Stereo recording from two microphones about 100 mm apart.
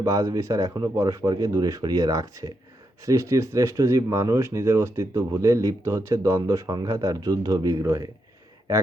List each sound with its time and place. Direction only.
0.0 s speech: 35° right (ahead or behind)